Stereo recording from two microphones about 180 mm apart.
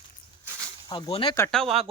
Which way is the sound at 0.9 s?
30° left (ahead or behind).